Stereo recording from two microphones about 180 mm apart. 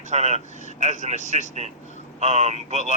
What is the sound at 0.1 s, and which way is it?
A man's voice, 40° right (ahead or behind).